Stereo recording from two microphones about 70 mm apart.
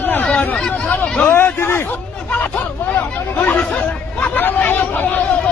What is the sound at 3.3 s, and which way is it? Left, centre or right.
Speech, left.